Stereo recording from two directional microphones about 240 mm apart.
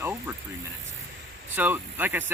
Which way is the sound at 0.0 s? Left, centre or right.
Centre.